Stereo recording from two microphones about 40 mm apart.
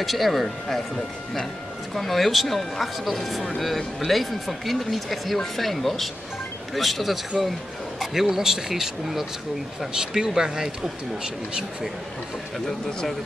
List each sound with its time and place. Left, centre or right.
0.0 s speech: centre
2.0 s speech: centre
12.5 s speech: centre